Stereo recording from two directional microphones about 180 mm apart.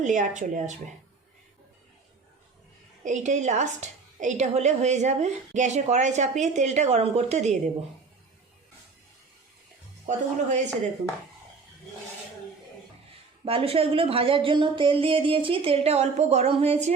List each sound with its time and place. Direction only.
0.0 s speech: 45° right (ahead or behind)
3.0 s a woman's voice: 40° right (ahead or behind)
10.1 s a woman's voice: 40° right (ahead or behind)
13.4 s a woman's voice: 30° right (ahead or behind)